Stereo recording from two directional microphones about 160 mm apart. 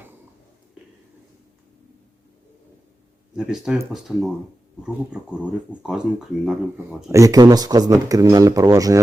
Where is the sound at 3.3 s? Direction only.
Centre (ahead or behind).